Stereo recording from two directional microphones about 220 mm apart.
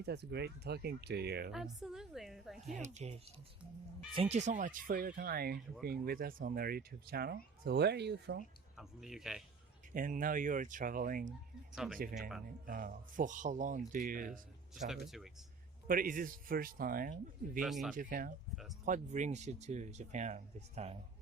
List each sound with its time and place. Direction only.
0.0 s speech: 50° right (ahead or behind)
1.5 s a woman's voice: centre (ahead or behind)
2.6 s speech: 30° right (ahead or behind); by 8.4 s 50° right (ahead or behind)
8.8 s a woman's voice: centre (ahead or behind)
9.9 s speech: 40° right (ahead or behind)
11.7 s a woman's voice: 5° right (ahead or behind)
12.6 s speech: 40° right (ahead or behind)
15.0 s a woman's voice: centre (ahead or behind)
15.9 s speech: 40° right (ahead or behind)
17.6 s a woman's voice: centre (ahead or behind)
17.9 s speech: 40° right (ahead or behind)